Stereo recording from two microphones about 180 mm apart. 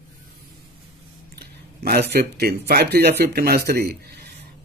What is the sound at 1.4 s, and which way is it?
Speech, 60° right (ahead or behind).